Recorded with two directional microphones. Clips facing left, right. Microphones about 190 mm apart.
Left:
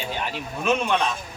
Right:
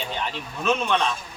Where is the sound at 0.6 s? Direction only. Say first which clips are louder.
Left 1 dB; 10° left (ahead or behind).